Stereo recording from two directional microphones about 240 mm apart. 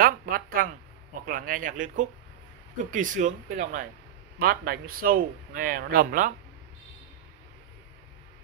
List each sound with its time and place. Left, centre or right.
0.0 s a man's voice: right